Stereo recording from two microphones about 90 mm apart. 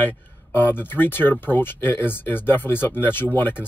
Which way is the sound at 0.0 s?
25° left (ahead or behind).